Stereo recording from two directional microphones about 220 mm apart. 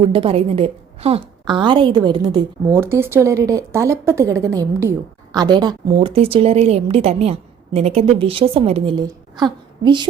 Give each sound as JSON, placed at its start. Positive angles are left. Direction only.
{"t": 0.0, "sound": "a woman's voice", "side_deg": -25}